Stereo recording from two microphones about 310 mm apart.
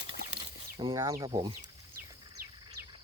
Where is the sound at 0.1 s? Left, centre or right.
Centre.